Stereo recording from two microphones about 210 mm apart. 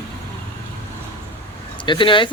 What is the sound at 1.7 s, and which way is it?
Speech, 20° left (ahead or behind).